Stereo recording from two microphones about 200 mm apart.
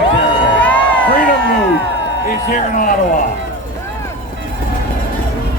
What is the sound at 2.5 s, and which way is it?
Speech, 45° left (ahead or behind).